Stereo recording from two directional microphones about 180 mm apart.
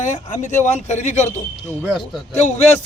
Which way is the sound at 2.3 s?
40° left (ahead or behind).